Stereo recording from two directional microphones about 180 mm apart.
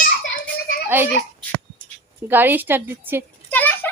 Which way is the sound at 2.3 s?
10° right (ahead or behind).